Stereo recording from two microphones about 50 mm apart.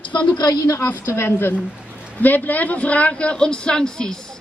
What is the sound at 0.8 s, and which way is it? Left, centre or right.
Speech, left.